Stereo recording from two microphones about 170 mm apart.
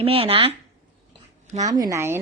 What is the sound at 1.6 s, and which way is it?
Speech, 20° right (ahead or behind).